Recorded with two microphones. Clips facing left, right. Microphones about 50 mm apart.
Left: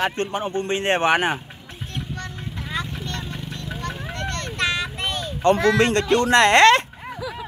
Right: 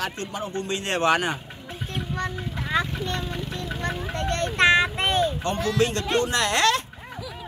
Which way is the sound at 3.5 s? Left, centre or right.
Centre.